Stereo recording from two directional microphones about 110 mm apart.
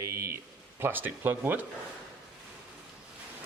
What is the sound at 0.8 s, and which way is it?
Speech, 20° right (ahead or behind).